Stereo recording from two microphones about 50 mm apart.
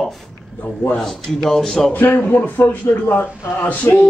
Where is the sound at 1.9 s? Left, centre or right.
Left.